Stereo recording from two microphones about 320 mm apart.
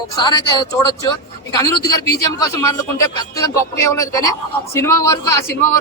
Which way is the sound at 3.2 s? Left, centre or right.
Centre.